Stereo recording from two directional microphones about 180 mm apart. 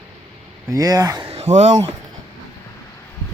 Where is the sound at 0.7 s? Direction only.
20° right (ahead or behind).